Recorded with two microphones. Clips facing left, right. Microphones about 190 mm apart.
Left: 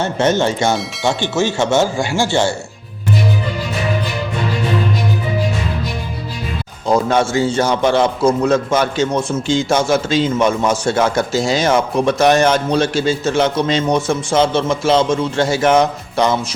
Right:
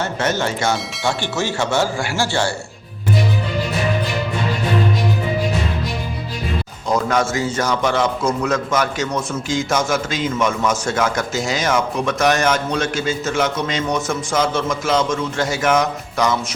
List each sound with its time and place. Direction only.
0.0 s speech: 25° left (ahead or behind)
6.8 s a man's voice: 30° left (ahead or behind)